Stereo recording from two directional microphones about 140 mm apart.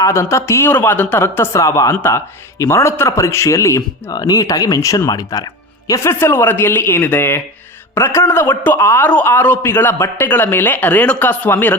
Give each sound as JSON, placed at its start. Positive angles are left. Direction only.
{"t": 0.0, "sound": "a man's voice", "side_deg": 20}